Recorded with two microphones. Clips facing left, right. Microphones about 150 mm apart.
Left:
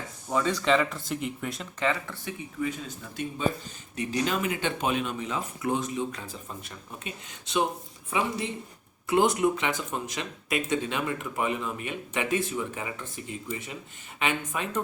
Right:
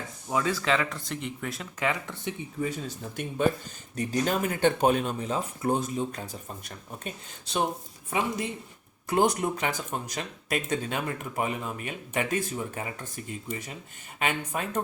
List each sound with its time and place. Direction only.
0.3 s speech: 5° right (ahead or behind)
1.9 s speech: 15° right (ahead or behind)
2.6 s speech: 35° right (ahead or behind)
3.2 s speech: 55° right (ahead or behind)
3.9 s speech: 40° right (ahead or behind)
9.0 s speech: 40° right (ahead or behind)